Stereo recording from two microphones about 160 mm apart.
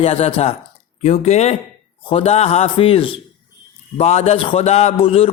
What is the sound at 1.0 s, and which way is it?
Mantra, 45° left (ahead or behind).